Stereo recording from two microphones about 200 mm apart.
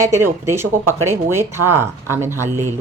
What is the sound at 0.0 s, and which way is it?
Speech, 15° right (ahead or behind).